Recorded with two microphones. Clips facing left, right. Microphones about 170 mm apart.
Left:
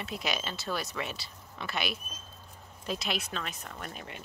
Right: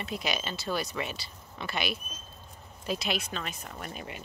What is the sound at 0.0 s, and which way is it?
Speech, centre (ahead or behind).